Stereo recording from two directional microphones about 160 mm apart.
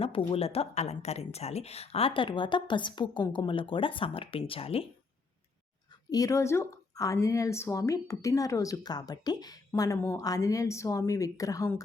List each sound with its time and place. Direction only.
0.0 s speech: 35° left (ahead or behind)
6.1 s speech: 20° left (ahead or behind)